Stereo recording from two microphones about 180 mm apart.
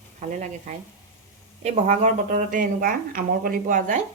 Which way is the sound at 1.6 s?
40° right (ahead or behind).